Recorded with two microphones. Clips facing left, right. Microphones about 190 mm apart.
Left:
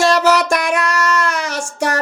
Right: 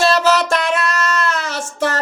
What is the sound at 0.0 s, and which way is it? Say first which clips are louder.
Child singing: left 1 dB; 15° left (ahead or behind).